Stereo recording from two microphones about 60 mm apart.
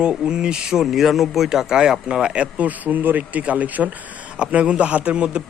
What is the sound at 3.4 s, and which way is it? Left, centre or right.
A man's voice, right.